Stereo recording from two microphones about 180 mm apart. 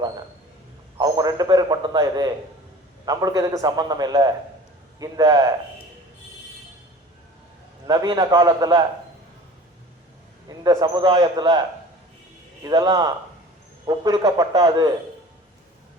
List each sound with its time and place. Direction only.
0.9 s a man's voice: 20° right (ahead or behind)
7.9 s a man's voice: 20° right (ahead or behind)
10.6 s a man's voice: 20° right (ahead or behind)
12.6 s a man's voice: 20° right (ahead or behind)